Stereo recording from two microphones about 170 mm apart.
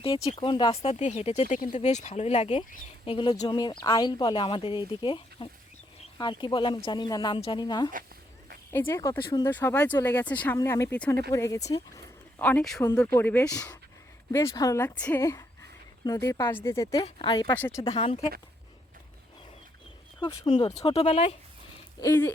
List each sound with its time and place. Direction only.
0.3 s speech: 30° left (ahead or behind)
8.7 s speech: 15° left (ahead or behind)
9.5 s speech: 10° left (ahead or behind)
11.7 s a sound: 20° left (ahead or behind)
12.5 s speech: 5° left (ahead or behind); by 17.5 s 30° left (ahead or behind)
17.6 s speech: 15° left (ahead or behind)
17.9 s speech: 35° left (ahead or behind)
20.1 s speech: 30° left (ahead or behind)
22.0 s speech: 15° left (ahead or behind)